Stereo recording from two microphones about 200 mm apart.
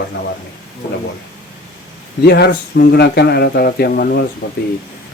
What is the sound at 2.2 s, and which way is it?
Speech, 55° left (ahead or behind).